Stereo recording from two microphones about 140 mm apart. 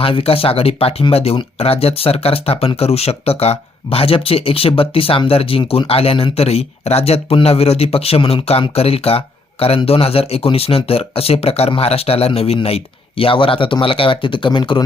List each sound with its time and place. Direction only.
0.0 s speech: 40° left (ahead or behind)